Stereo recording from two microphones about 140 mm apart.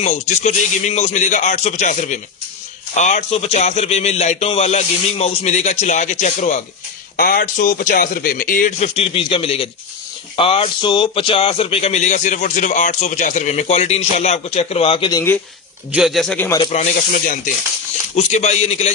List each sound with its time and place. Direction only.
0.0 s a man's voice: 55° left (ahead or behind)
7.2 s speech: 90° left
9.0 s speech: 45° left (ahead or behind)
15.9 s speech: 5° right (ahead or behind)
16.6 s speech: 55° left (ahead or behind)
17.1 s speech: 85° left
18.2 s speech: 55° left (ahead or behind)